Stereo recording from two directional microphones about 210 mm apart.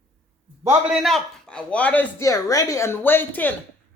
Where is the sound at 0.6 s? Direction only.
Centre (ahead or behind).